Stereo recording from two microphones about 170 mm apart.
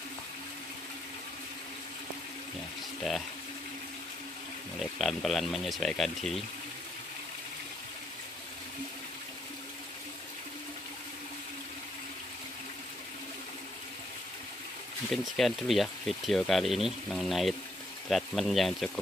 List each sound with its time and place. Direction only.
3.0 s speech: centre (ahead or behind)
4.7 s speech: centre (ahead or behind)
15.0 s speech: centre (ahead or behind)